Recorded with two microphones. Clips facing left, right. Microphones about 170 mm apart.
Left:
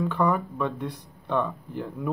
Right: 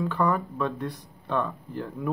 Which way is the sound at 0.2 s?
15° left (ahead or behind).